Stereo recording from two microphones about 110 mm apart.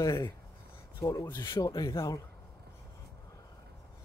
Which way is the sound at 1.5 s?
35° left (ahead or behind).